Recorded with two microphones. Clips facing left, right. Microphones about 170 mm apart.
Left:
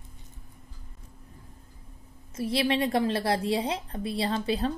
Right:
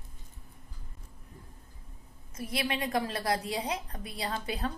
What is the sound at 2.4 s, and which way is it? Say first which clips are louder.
A woman's voice: left 7 dB; 30° left (ahead or behind).